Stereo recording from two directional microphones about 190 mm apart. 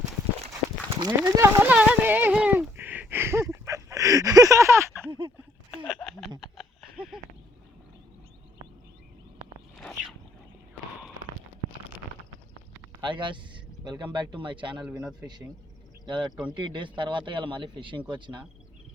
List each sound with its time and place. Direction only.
0.9 s horse: 20° right (ahead or behind)
5.9 s a sound: centre (ahead or behind)
9.7 s a sound: centre (ahead or behind)
13.0 s speech: 25° right (ahead or behind)
14.8 s speech: 10° right (ahead or behind)
16.0 s speech: 25° right (ahead or behind)
16.3 s speech: 5° right (ahead or behind)
16.6 s speech: 25° right (ahead or behind)